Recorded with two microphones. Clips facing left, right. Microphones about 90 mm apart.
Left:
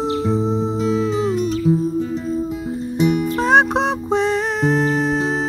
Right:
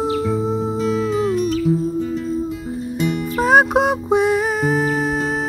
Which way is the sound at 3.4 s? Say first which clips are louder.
Right 3 dB; 5° right (ahead or behind).